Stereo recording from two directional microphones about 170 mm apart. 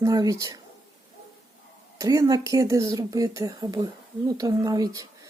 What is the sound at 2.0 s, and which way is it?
Speech, 20° right (ahead or behind).